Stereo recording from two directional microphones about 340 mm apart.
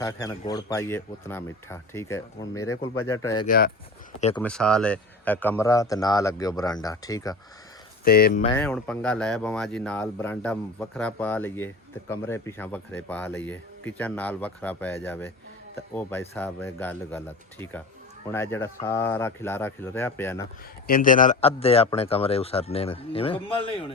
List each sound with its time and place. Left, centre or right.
0.0 s speech: centre
3.4 s speech: left
4.4 s speech: centre
8.0 s speech: left
8.4 s speech: centre
20.8 s speech: left